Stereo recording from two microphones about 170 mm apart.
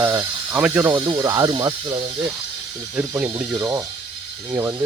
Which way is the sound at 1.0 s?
20° right (ahead or behind).